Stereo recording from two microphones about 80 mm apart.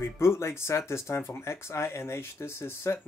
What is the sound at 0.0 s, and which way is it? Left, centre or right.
Speech, left.